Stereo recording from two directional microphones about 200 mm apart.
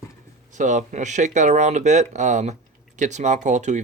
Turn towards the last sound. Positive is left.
turn(degrees=-35)  # may be behind; listen again after turning